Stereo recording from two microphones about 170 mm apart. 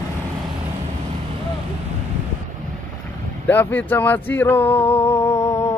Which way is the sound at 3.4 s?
10° left (ahead or behind).